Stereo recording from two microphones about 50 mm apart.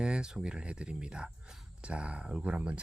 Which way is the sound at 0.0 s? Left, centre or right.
Centre.